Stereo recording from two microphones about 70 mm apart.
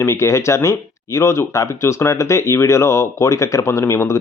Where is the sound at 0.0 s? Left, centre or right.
Left.